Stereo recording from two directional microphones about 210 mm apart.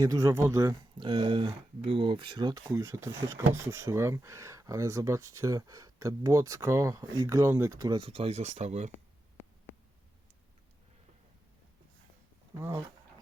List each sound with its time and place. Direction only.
0.0 s speech: 15° right (ahead or behind); by 8.9 s 30° right (ahead or behind)
12.5 s speech: 10° right (ahead or behind)